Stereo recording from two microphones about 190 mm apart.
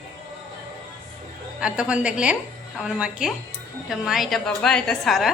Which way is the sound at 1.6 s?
5° right (ahead or behind).